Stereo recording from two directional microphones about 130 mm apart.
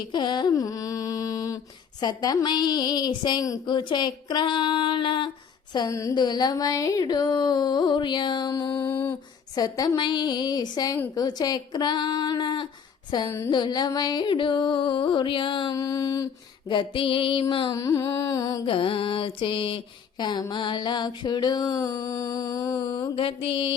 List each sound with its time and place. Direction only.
0.1 s mantra: 35° left (ahead or behind)
5.7 s mantra: 30° left (ahead or behind)
9.6 s a woman's voice: 30° left (ahead or behind)
11.1 s mantra: 30° left (ahead or behind)
15.7 s mantra: 25° left (ahead or behind); by 17.7 s 45° left (ahead or behind)
17.7 s a woman's voice: 25° left (ahead or behind)
18.6 s mantra: 40° left (ahead or behind); by 23.0 s 25° left (ahead or behind)
23.1 s mantra: 45° left (ahead or behind)